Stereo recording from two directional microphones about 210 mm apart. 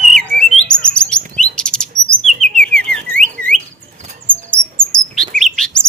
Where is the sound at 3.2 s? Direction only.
5° left (ahead or behind).